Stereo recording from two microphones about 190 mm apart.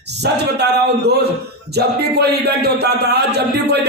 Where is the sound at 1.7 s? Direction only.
60° right (ahead or behind).